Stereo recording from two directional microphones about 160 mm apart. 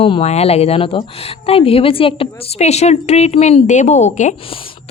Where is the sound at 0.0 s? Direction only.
40° left (ahead or behind).